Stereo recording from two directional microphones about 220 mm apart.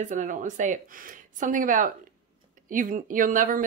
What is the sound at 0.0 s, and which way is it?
A woman's voice, 35° right (ahead or behind).